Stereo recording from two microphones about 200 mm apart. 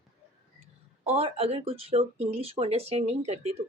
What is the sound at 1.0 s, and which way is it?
Speech, 30° right (ahead or behind).